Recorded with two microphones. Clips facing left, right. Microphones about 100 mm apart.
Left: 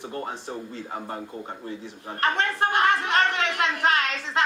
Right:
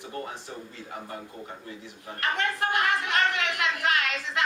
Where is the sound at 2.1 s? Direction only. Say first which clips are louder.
Left 4 dB; 30° left (ahead or behind).